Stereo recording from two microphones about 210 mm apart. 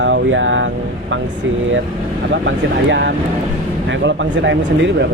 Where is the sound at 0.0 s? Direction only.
60° right (ahead or behind).